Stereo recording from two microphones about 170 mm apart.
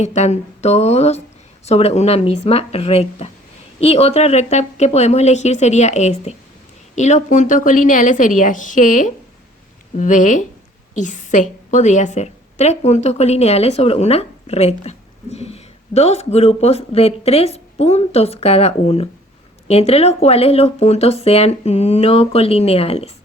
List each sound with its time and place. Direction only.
0.0 s a woman's voice: 40° left (ahead or behind)